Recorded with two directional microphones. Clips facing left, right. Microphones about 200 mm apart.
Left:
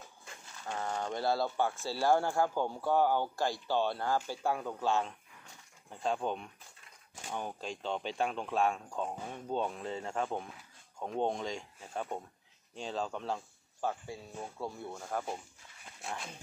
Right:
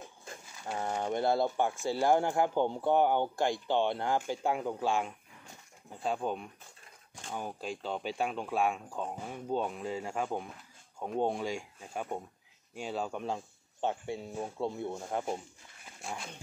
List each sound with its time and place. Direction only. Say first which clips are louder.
0.6 s a sound: right 2 dB; 15° right (ahead or behind)
1.1 s speech: right 3 dB; 20° right (ahead or behind)
16.0 s speech: right 1 dB; centre (ahead or behind)